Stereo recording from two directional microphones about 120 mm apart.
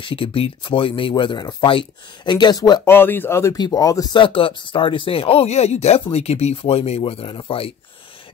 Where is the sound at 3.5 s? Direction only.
35° left (ahead or behind).